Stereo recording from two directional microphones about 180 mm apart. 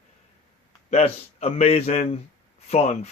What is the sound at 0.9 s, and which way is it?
Speech, 35° left (ahead or behind).